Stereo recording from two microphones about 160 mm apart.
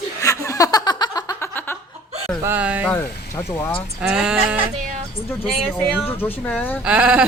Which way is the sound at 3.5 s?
10° left (ahead or behind).